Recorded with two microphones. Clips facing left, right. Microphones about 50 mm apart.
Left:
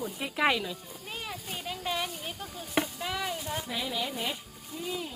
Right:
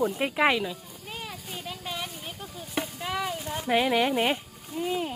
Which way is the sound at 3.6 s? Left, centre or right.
Right.